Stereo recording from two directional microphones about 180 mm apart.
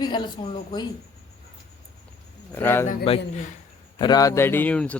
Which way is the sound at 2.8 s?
30° left (ahead or behind).